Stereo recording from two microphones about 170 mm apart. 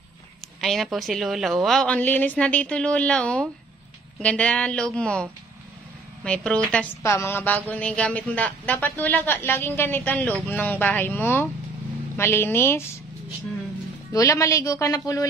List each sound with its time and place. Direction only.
0.6 s a woman's voice: centre (ahead or behind)
14.1 s a woman's voice: 20° left (ahead or behind)